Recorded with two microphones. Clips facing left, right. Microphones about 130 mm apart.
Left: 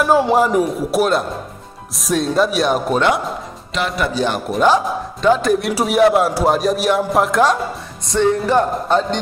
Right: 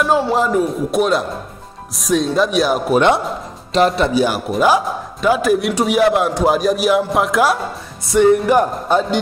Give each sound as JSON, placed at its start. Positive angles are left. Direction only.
{"t": 0.2, "sound": "speech", "side_deg": 15}
{"t": 2.0, "sound": "a man's voice", "side_deg": 0}
{"t": 3.7, "sound": "speech", "side_deg": -30}
{"t": 4.1, "sound": "music", "side_deg": -10}
{"t": 4.5, "sound": "a man's voice", "side_deg": -5}
{"t": 8.0, "sound": "music", "side_deg": -10}